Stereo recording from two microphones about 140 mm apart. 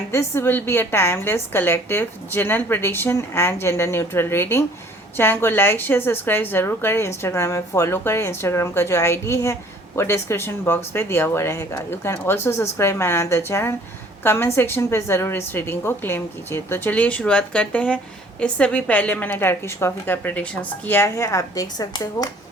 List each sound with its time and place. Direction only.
0.1 s a woman's voice: 20° left (ahead or behind)